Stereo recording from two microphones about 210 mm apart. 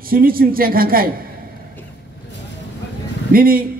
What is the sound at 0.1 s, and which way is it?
A man's voice, 45° right (ahead or behind).